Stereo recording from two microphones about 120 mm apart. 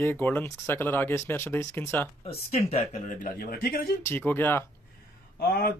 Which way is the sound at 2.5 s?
60° left (ahead or behind).